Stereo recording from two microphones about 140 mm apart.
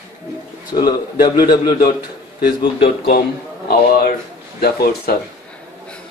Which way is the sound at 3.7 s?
90° left.